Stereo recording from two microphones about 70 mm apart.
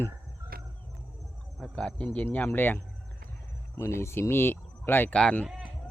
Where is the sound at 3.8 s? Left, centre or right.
Left.